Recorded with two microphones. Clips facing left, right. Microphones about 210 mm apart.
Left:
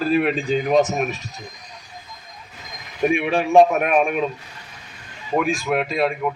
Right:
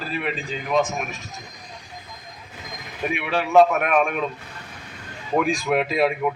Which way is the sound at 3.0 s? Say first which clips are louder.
Left 8 dB; 50° left (ahead or behind).